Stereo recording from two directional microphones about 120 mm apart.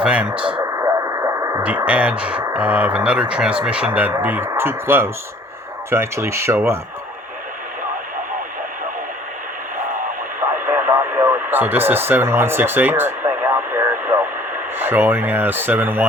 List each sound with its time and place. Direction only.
0.0 s speech: 10° right (ahead or behind)
0.6 s radio: 25° right (ahead or behind)
1.6 s speech: 10° right (ahead or behind)
9.7 s radio: 90° right
10.7 s radio: 15° right (ahead or behind)
14.8 s speech: 15° right (ahead or behind)